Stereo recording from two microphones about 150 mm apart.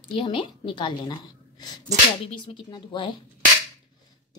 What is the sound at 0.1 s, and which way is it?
A woman's voice, 35° left (ahead or behind).